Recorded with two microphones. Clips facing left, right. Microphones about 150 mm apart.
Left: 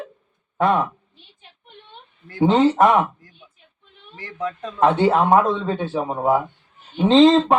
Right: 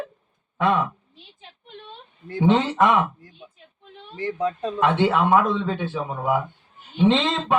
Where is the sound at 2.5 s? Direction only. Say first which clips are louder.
Left 3 dB; 35° left (ahead or behind).